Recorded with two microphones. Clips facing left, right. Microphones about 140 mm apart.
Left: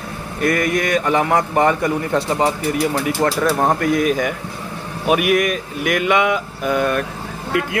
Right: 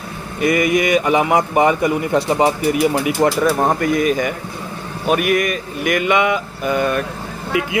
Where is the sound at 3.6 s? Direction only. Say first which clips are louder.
Even; centre (ahead or behind).